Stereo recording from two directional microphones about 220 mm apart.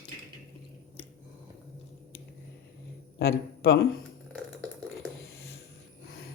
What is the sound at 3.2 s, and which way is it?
Speech, 45° left (ahead or behind).